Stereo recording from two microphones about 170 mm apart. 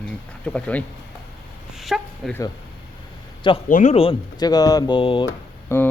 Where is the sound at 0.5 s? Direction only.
5° left (ahead or behind).